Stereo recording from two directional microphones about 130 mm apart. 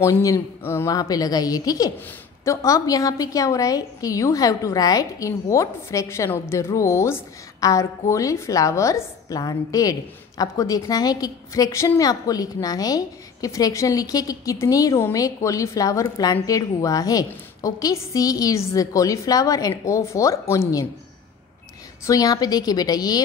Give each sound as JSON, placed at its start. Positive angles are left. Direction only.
{"t": 0.0, "sound": "a woman's voice", "side_deg": 25}
{"t": 22.0, "sound": "a woman's voice", "side_deg": 25}